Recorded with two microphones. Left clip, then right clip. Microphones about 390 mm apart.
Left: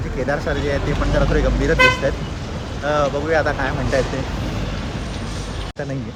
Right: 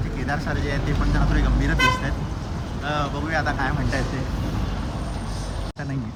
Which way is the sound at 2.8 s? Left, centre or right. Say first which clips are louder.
Left 8 dB; centre.